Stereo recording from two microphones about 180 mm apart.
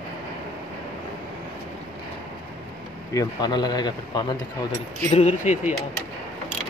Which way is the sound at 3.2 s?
25° left (ahead or behind).